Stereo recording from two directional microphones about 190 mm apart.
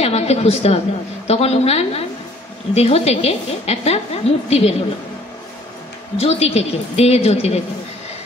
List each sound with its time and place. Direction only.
0.0 s a woman's voice: 35° left (ahead or behind)
6.1 s a woman's voice: 35° left (ahead or behind)